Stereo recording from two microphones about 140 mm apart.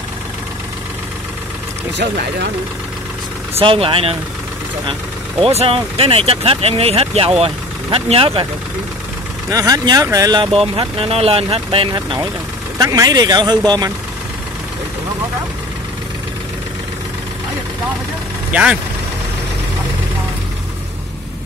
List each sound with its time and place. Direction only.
3.5 s speech: 40° right (ahead or behind)
5.4 s speech: 45° right (ahead or behind)
9.5 s speech: 25° right (ahead or behind)
10.4 s speech: 40° right (ahead or behind)
11.9 s speech: 30° right (ahead or behind)
18.5 s speech: 10° right (ahead or behind)